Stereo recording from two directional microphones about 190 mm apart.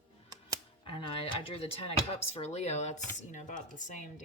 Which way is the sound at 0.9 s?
30° left (ahead or behind).